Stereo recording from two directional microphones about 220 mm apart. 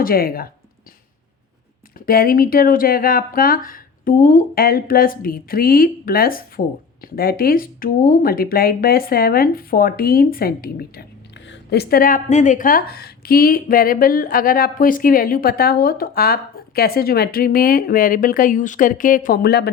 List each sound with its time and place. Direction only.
0.0 s speech: 40° left (ahead or behind)
2.0 s speech: 40° left (ahead or behind)